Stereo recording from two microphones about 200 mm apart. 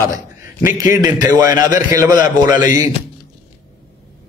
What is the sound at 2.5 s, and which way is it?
Speech, 40° left (ahead or behind).